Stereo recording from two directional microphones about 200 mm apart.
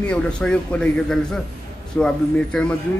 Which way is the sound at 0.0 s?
5° left (ahead or behind).